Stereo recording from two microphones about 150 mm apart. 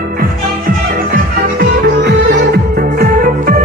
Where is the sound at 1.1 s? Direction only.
80° right.